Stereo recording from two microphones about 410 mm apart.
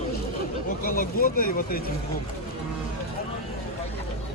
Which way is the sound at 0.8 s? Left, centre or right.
Left.